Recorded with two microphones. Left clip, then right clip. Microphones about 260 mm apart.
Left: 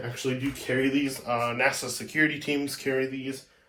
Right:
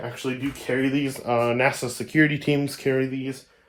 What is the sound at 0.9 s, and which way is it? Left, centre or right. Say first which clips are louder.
Speech: right 4 dB; right.